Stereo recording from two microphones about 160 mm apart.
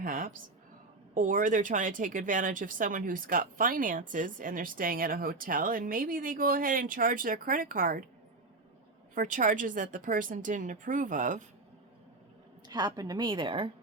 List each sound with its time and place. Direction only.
0.0 s a sound: 60° right (ahead or behind)
1.1 s speech: 55° right (ahead or behind)
9.1 s speech: 55° right (ahead or behind)
12.6 s a woman's voice: 25° right (ahead or behind)